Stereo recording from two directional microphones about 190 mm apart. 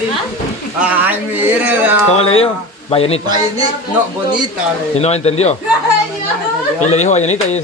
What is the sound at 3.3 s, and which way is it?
Speech, 20° right (ahead or behind).